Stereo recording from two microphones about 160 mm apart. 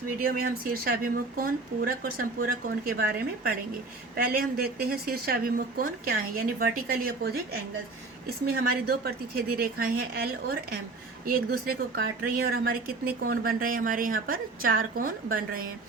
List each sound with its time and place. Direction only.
0.2 s a woman's voice: 65° right (ahead or behind)
8.4 s a woman's voice: 70° right (ahead or behind)